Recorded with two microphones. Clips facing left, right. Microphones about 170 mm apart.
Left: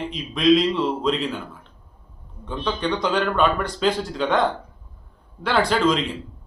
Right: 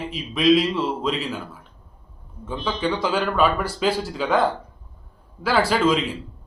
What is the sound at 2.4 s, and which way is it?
A man's voice, 5° right (ahead or behind).